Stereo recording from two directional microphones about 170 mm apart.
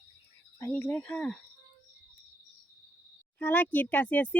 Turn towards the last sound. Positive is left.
turn(degrees=10)  # may be behind; listen again after turning